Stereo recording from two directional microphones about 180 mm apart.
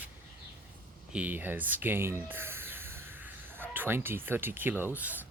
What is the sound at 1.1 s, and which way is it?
Speech, 10° right (ahead or behind).